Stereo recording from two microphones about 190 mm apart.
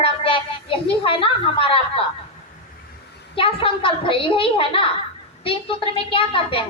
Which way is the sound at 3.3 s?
30° left (ahead or behind).